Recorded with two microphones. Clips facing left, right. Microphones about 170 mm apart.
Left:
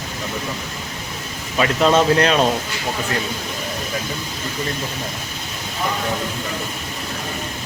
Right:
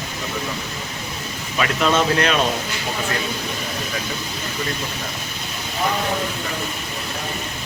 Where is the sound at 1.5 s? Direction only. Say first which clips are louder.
Left 4 dB; 30° left (ahead or behind).